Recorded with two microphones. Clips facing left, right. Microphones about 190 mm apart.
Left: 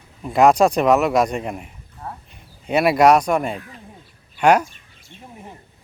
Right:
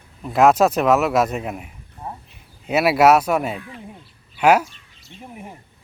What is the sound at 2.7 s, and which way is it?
A man's voice, 5° right (ahead or behind).